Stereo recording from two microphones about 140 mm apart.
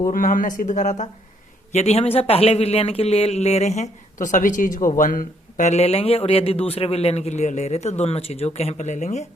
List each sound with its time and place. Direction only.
0.1 s speech: 80° left; by 1.0 s 60° left (ahead or behind)
1.7 s speech: 50° left (ahead or behind)